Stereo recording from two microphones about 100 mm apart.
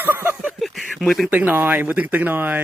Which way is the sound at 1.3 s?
20° right (ahead or behind).